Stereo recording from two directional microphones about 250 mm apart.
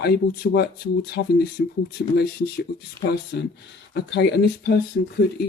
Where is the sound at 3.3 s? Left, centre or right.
Left.